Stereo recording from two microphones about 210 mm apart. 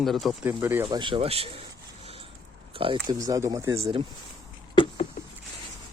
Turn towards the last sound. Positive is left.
turn(degrees=25)  # may be behind; listen again after turning